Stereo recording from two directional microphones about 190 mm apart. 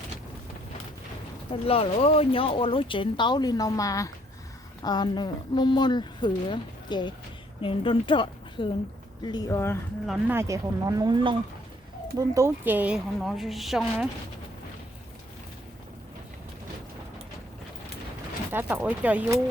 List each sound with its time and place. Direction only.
1.6 s a woman's voice: 30° left (ahead or behind); by 9.7 s 15° left (ahead or behind)
10.1 s a woman's voice: 10° right (ahead or behind)
18.5 s speech: 10° right (ahead or behind)